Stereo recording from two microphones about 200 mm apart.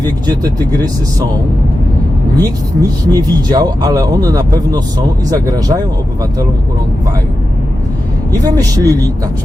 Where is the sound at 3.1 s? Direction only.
20° right (ahead or behind).